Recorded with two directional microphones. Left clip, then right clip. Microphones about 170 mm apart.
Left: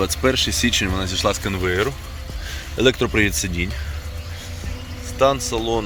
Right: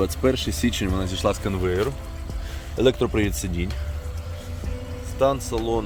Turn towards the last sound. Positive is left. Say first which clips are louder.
# left 3 dB
turn(degrees=-5)  # may be behind; listen again after turning